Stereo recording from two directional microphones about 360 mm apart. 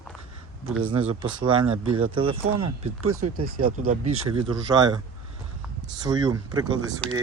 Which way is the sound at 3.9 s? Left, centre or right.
Centre.